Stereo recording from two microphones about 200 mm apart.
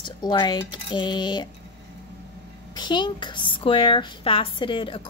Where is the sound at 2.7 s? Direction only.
20° left (ahead or behind).